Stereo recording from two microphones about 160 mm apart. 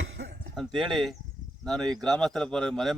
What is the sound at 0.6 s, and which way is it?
A man's voice, centre (ahead or behind).